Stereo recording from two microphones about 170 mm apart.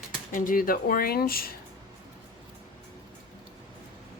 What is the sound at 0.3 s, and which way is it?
Speech, 55° left (ahead or behind).